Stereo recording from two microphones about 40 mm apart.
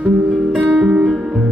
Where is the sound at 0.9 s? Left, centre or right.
Right.